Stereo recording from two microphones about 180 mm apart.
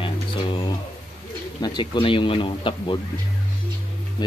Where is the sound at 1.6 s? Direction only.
25° left (ahead or behind).